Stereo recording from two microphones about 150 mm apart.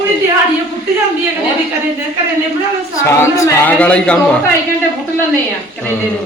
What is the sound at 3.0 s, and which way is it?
A woman's voice, 20° left (ahead or behind).